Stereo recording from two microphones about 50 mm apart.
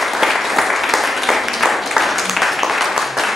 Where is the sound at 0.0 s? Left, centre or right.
Centre.